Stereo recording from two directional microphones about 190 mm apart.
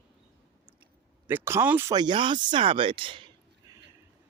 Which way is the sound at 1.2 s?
10° right (ahead or behind).